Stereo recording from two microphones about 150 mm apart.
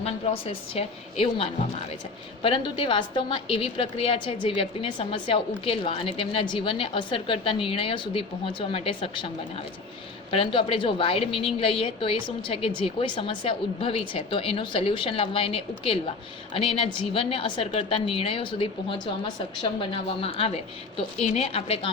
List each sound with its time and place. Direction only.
0.0 s a woman's voice: 40° left (ahead or behind)
2.4 s a woman's voice: 35° left (ahead or behind)
10.3 s a woman's voice: 35° left (ahead or behind)